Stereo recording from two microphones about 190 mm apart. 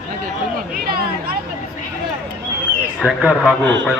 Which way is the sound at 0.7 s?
55° right (ahead or behind).